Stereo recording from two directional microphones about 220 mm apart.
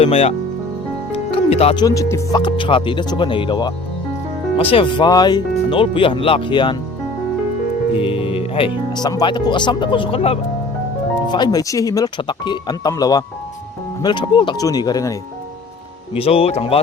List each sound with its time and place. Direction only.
0.0 s speech: 25° left (ahead or behind)
7.9 s speech: 25° left (ahead or behind)
16.1 s speech: 25° left (ahead or behind)